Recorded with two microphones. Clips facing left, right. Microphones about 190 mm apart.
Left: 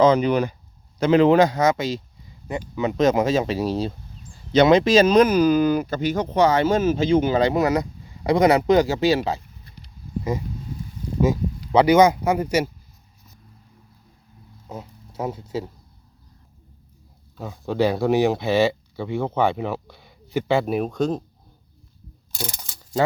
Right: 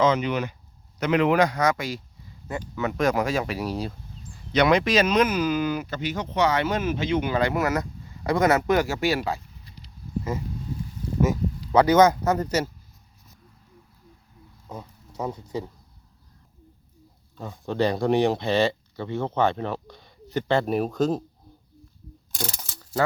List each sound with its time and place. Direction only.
0.0 s speech: 35° left (ahead or behind)
11.7 s speech: 10° left (ahead or behind)
15.1 s speech: 10° left (ahead or behind)
17.3 s speech: 5° left (ahead or behind)
22.4 s mechanisms: 15° left (ahead or behind)